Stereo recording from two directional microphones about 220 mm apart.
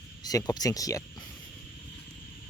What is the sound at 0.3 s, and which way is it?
Speech, 15° left (ahead or behind).